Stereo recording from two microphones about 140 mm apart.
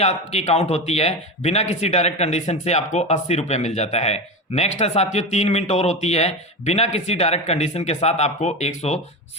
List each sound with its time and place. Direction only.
0.0 s speech: 50° left (ahead or behind)